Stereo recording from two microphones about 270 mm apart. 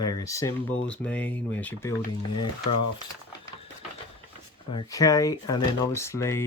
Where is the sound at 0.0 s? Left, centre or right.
Centre.